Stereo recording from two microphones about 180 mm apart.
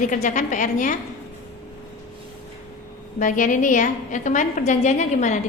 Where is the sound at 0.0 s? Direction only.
45° left (ahead or behind).